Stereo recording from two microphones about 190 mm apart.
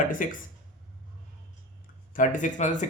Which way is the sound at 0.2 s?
45° left (ahead or behind).